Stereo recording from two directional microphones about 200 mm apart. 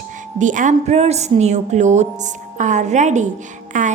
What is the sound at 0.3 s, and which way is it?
A woman's voice, 40° right (ahead or behind).